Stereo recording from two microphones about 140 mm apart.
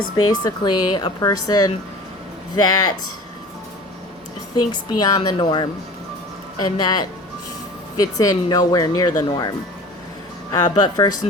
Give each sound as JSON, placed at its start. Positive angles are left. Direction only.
{"t": 0.3, "sound": "speech", "side_deg": 30}
{"t": 4.5, "sound": "speech", "side_deg": 30}